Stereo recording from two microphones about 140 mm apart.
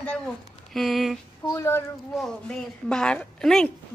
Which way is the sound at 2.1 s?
5° left (ahead or behind).